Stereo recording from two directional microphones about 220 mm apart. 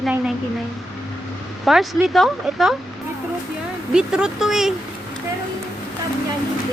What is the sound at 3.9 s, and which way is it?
Speech, 5° right (ahead or behind).